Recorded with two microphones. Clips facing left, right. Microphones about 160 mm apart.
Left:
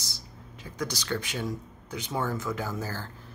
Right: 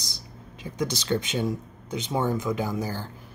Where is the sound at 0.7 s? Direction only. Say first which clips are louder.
Right 5 dB; 20° right (ahead or behind).